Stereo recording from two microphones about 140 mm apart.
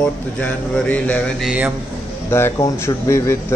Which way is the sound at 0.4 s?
10° left (ahead or behind).